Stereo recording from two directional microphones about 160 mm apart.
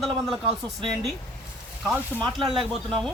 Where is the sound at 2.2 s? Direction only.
5° left (ahead or behind).